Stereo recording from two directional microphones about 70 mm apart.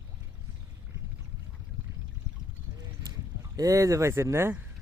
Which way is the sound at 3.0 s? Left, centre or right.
Right.